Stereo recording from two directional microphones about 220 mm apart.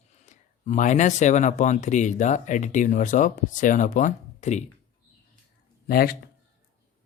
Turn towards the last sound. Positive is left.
turn(degrees=45)  # may be behind; listen again after turning